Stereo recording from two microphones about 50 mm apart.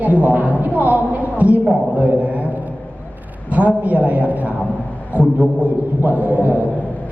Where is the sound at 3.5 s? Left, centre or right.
Right.